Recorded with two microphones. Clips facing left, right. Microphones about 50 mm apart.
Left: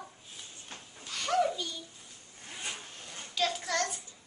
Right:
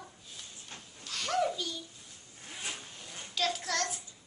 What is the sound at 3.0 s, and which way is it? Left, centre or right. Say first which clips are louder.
Child singing: left 1 dB; centre.